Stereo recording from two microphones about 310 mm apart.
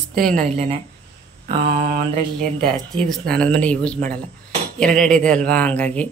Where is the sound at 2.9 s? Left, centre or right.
Centre.